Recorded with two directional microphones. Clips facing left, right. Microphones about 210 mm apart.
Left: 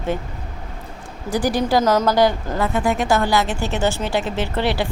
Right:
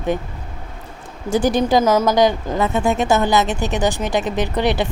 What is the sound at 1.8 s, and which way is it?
A woman's voice, 10° right (ahead or behind).